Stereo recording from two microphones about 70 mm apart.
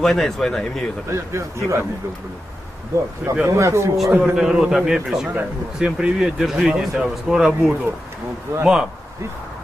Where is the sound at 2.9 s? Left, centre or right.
Right.